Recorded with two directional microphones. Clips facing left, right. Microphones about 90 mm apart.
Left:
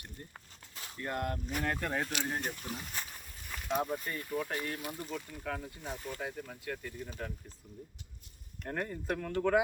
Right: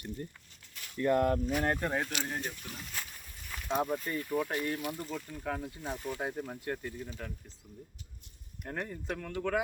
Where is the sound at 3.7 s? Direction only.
Centre (ahead or behind).